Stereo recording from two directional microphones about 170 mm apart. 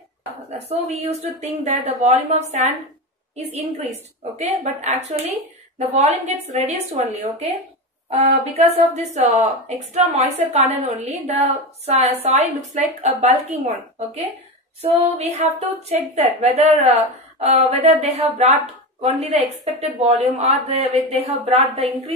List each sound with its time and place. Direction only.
0.7 s a woman's voice: 40° right (ahead or behind)
4.2 s a woman's voice: 40° right (ahead or behind)
20.0 s a woman's voice: 35° right (ahead or behind)